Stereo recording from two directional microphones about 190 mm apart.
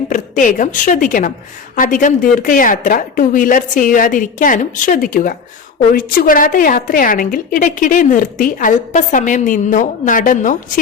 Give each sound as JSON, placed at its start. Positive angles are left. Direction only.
{"t": 0.1, "sound": "a woman's voice", "side_deg": 45}